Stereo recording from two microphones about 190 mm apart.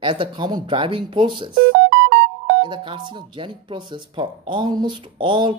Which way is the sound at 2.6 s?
25° right (ahead or behind).